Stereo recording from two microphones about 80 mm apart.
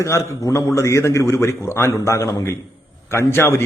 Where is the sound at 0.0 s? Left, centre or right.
Left.